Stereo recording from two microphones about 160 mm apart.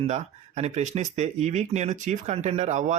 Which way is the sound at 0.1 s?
45° right (ahead or behind).